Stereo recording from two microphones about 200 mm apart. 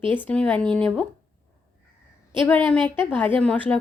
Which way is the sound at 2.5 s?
5° left (ahead or behind).